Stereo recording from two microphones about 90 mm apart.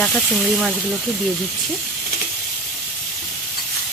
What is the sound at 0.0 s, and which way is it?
Speech, 10° left (ahead or behind).